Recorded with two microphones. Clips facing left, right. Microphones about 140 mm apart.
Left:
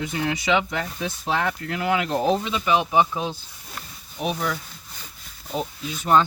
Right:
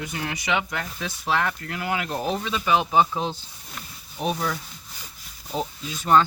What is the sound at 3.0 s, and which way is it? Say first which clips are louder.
Speech: even; 5° left (ahead or behind).